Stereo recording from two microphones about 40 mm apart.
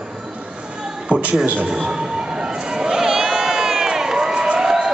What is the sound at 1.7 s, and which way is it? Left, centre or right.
Crowd, centre.